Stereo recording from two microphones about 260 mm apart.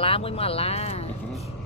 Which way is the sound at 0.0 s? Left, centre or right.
Left.